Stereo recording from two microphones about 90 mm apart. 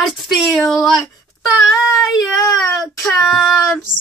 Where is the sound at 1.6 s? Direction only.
Centre (ahead or behind).